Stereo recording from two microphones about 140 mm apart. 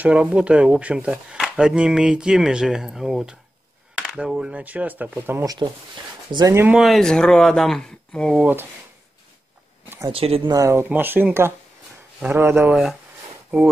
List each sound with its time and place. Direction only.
0.0 s speech: 10° right (ahead or behind)
5.4 s speech: 30° right (ahead or behind)
6.6 s speech: 5° right (ahead or behind)
9.8 s a sound: 25° right (ahead or behind)
10.1 s speech: 45° right (ahead or behind)
10.5 s speech: 20° right (ahead or behind)
12.6 s speech: centre (ahead or behind)